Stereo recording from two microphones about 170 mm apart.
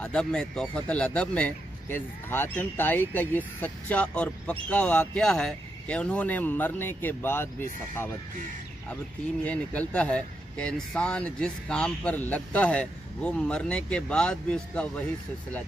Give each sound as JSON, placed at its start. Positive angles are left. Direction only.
{"t": 0.0, "sound": "speech", "side_deg": 5}
{"t": 9.4, "sound": "speech", "side_deg": 10}